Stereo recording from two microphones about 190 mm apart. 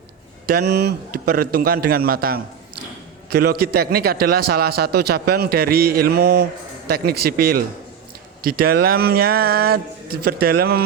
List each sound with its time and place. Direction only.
0.4 s a man's voice: 55° right (ahead or behind)